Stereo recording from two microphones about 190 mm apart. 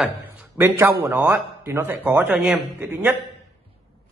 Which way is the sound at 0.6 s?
10° right (ahead or behind).